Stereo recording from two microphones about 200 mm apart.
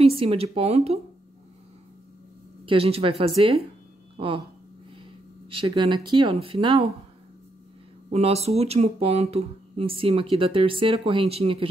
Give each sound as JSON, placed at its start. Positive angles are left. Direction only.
{"t": 0.0, "sound": "speech", "side_deg": -25}
{"t": 2.6, "sound": "speech", "side_deg": -30}
{"t": 5.5, "sound": "speech", "side_deg": -25}
{"t": 8.1, "sound": "speech", "side_deg": -30}